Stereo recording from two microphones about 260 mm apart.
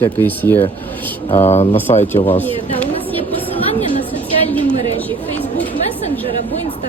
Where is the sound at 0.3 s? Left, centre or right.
Centre.